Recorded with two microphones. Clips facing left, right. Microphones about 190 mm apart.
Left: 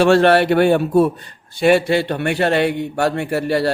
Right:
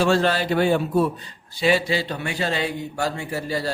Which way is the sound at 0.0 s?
70° left (ahead or behind).